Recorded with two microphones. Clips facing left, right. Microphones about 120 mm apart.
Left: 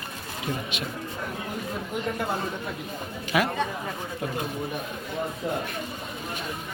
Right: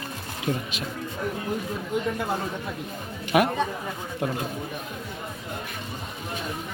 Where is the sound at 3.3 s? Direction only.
50° right (ahead or behind).